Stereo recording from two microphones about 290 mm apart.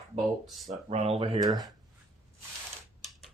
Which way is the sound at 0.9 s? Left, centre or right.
Right.